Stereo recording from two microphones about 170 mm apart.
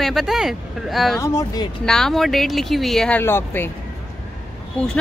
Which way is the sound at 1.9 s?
Centre (ahead or behind).